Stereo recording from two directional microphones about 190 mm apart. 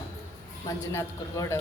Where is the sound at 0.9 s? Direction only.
15° left (ahead or behind).